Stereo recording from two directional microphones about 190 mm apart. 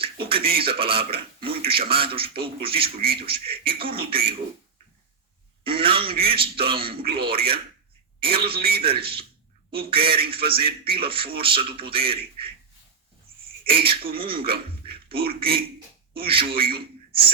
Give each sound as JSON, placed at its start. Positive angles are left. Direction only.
{"t": 0.0, "sound": "speech", "side_deg": -30}
{"t": 5.6, "sound": "speech", "side_deg": -30}
{"t": 13.7, "sound": "speech", "side_deg": -30}